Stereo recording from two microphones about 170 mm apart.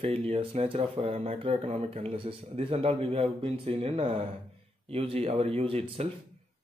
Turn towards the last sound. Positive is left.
turn(degrees=-35)  # may be behind; listen again after turning